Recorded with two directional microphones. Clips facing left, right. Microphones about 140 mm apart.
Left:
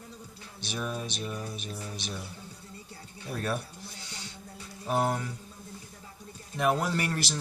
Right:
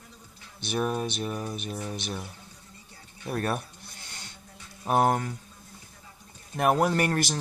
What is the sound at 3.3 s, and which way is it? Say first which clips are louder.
Mantra: right 3 dB; 55° right (ahead or behind).